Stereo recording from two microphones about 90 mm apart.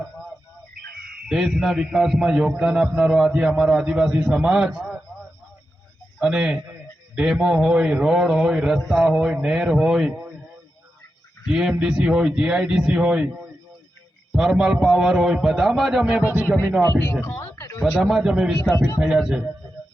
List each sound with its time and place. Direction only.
1.3 s a man's voice: 5° right (ahead or behind)
6.1 s a man's voice: 5° right (ahead or behind)
11.4 s a man's voice: 5° right (ahead or behind)
16.8 s speech: 30° left (ahead or behind)
18.0 s a man's voice: 5° right (ahead or behind)